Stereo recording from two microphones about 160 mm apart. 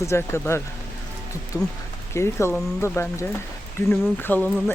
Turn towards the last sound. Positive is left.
turn(degrees=10)  # may be behind; listen again after turning